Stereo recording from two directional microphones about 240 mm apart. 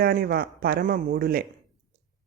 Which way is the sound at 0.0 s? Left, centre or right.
Right.